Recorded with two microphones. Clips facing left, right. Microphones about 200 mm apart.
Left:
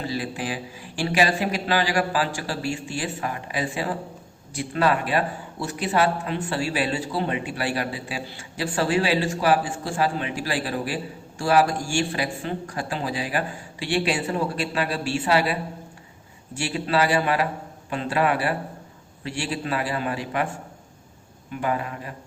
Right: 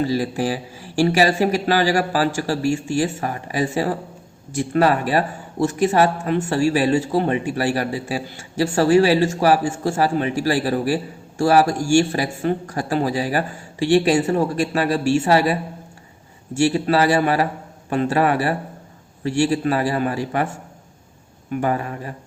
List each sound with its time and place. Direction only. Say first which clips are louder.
0.2 s a man's voice: right 7 dB; 40° right (ahead or behind)
16.6 s a man's voice: right 6 dB; 45° right (ahead or behind)
21.5 s a man's voice: right 5 dB; 40° right (ahead or behind)